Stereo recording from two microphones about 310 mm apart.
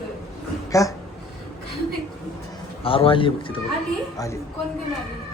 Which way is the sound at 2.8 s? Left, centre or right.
Centre.